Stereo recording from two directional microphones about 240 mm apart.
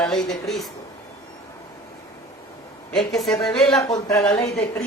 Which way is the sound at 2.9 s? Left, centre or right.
Centre.